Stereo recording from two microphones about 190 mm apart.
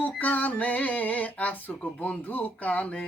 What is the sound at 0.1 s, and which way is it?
Speech, 10° left (ahead or behind).